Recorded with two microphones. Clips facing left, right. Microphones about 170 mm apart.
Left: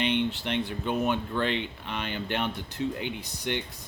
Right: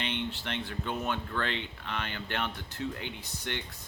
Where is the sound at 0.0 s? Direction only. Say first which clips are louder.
Left 8 dB; 15° left (ahead or behind).